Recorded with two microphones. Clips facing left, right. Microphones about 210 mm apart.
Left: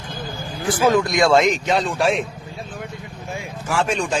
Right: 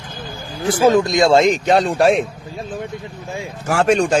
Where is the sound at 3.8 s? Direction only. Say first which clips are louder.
Right 7 dB; 45° right (ahead or behind).